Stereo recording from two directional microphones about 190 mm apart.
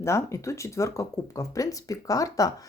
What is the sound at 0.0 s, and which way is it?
Speech, 15° left (ahead or behind).